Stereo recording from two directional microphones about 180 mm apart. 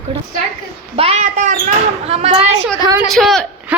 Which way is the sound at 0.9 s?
35° right (ahead or behind).